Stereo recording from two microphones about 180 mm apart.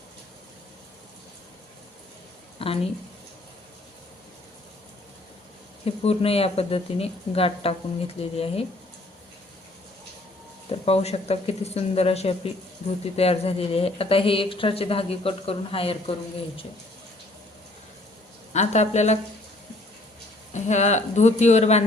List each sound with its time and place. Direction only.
2.6 s a woman's voice: 30° left (ahead or behind)
5.8 s speech: 35° left (ahead or behind)
10.7 s speech: 35° left (ahead or behind)
18.5 s speech: 40° left (ahead or behind)
20.5 s speech: 40° left (ahead or behind)